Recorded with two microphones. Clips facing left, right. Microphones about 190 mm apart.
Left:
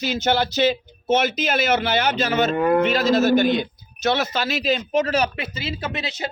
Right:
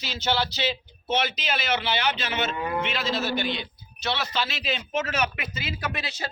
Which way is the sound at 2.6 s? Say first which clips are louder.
Left 11 dB; 55° left (ahead or behind).